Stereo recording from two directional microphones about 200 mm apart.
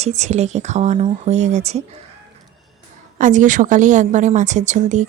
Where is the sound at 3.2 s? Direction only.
40° right (ahead or behind).